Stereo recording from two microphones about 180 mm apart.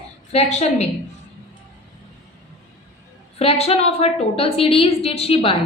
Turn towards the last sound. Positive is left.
turn(degrees=30)  # may be behind; listen again after turning